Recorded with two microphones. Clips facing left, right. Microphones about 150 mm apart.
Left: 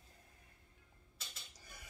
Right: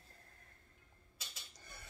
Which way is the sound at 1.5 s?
10° left (ahead or behind).